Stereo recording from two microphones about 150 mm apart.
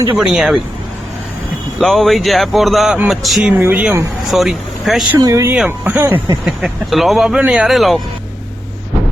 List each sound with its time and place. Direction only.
0.2 s speech: 5° right (ahead or behind)
1.8 s speech: centre (ahead or behind)
5.1 s speech: 20° right (ahead or behind)
6.4 s speech: 5° right (ahead or behind)